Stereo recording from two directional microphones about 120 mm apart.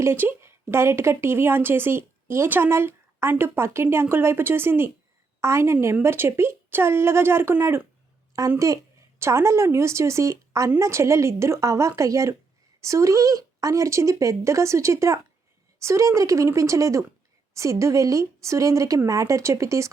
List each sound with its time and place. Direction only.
0.0 s a woman's voice: 20° right (ahead or behind)